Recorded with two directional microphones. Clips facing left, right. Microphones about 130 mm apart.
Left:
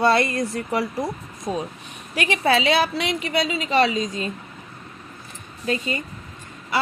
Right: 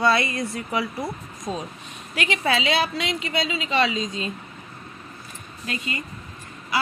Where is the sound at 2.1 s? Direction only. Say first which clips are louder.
Left 4 dB; 35° left (ahead or behind).